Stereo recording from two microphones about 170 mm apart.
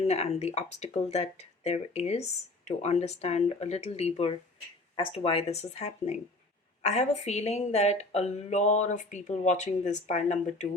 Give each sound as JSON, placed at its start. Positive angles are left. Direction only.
{"t": 0.1, "sound": "speech", "side_deg": 40}